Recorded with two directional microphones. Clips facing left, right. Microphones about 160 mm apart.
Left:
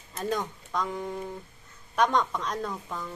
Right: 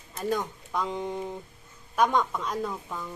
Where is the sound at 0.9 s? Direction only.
20° right (ahead or behind).